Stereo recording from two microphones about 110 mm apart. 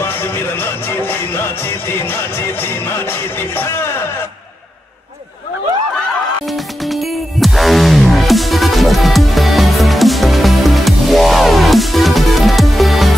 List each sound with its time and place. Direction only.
0.0 s music: 20° left (ahead or behind)
6.4 s music: centre (ahead or behind)